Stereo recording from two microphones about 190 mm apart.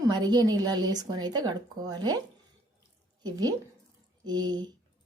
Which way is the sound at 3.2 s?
20° right (ahead or behind).